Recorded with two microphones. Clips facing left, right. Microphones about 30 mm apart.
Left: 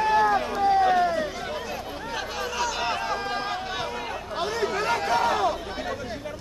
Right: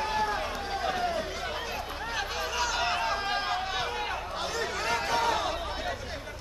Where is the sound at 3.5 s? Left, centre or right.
Centre.